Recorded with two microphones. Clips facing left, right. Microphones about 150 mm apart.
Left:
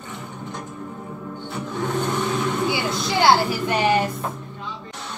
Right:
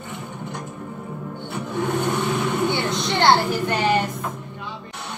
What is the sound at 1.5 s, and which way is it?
Vehicle, 15° right (ahead or behind).